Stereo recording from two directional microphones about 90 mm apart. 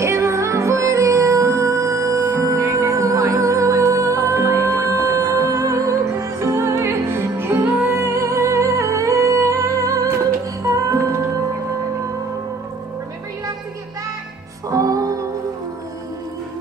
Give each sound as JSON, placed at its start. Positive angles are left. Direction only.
{"t": 0.0, "sound": "music", "side_deg": -35}
{"t": 14.7, "sound": "music", "side_deg": -40}